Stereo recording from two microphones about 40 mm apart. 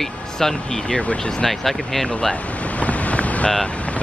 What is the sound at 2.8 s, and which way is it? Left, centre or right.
Boat, left.